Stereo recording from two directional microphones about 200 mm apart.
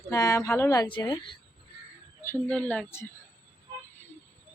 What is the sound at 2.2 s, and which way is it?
Speech, 10° left (ahead or behind).